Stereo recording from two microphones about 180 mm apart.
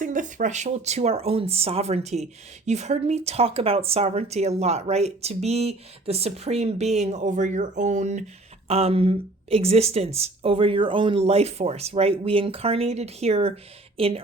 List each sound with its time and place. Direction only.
0.0 s speech: 45° right (ahead or behind)